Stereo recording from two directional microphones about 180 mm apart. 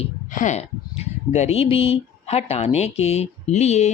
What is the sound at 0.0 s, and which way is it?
Speech, 45° left (ahead or behind).